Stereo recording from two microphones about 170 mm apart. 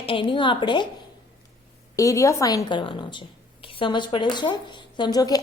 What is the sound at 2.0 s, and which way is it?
A woman's voice, 20° left (ahead or behind).